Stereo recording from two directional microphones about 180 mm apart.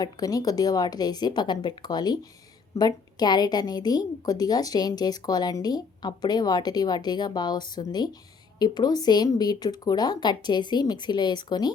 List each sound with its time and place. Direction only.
0.0 s a woman's voice: 20° left (ahead or behind)